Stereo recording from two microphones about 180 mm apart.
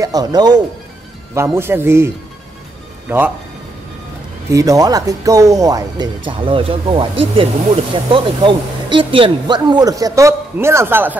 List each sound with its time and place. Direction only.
0.0 s a man's voice: 20° right (ahead or behind)
4.5 s speech: 20° right (ahead or behind)